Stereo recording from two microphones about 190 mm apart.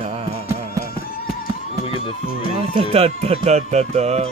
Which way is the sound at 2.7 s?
35° right (ahead or behind).